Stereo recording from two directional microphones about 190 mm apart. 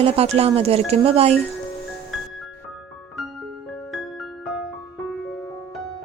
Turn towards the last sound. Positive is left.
turn(degrees=0)  # may be behind; listen again after turning